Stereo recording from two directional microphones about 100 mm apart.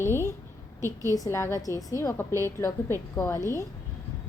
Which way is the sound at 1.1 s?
35° left (ahead or behind).